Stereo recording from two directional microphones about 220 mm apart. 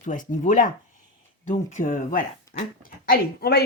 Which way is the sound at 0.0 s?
35° left (ahead or behind).